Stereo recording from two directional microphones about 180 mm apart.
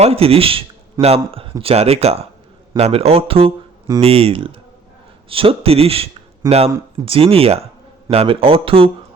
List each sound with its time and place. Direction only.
0.0 s speech: 35° right (ahead or behind)
6.4 s speech: 20° right (ahead or behind)
7.0 s speech: 30° right (ahead or behind)